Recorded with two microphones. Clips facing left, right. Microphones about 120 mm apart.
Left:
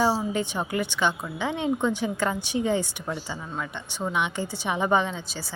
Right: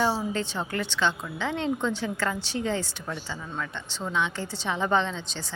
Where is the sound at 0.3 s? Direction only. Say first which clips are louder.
Left 3 dB; 15° left (ahead or behind).